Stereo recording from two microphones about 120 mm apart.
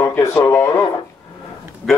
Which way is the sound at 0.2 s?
20° left (ahead or behind).